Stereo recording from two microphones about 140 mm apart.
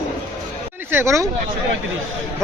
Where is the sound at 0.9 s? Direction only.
20° right (ahead or behind).